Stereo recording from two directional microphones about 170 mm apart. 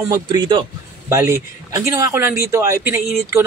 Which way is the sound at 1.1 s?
15° right (ahead or behind).